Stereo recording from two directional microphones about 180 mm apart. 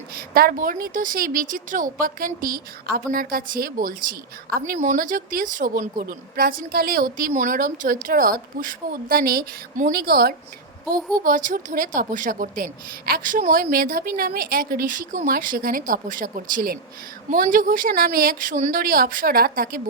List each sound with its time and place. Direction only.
0.1 s a woman's voice: 55° right (ahead or behind)
11.2 s a woman's voice: 45° right (ahead or behind)